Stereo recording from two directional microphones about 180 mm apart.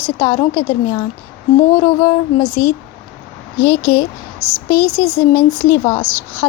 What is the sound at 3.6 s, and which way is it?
Speech, 65° left (ahead or behind).